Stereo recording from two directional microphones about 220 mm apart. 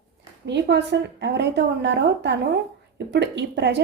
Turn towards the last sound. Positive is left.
turn(degrees=-50)  # may be behind; listen again after turning